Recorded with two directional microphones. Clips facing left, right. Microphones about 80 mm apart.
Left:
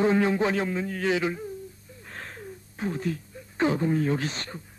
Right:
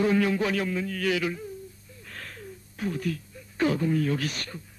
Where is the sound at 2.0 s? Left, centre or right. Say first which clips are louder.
Left 2 dB; left.